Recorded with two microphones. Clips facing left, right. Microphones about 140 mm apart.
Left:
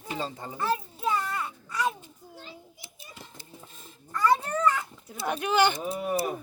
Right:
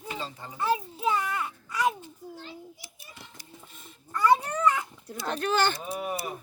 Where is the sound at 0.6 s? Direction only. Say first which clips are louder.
Right 2 dB; 10° right (ahead or behind).